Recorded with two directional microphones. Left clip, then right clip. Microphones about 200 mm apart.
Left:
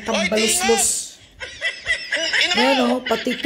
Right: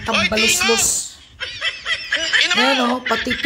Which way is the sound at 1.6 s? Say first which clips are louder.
Even; 5° right (ahead or behind).